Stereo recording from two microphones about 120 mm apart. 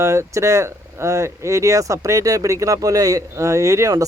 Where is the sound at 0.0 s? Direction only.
25° right (ahead or behind).